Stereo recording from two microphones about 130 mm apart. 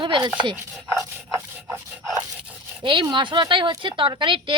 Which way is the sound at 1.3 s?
20° right (ahead or behind).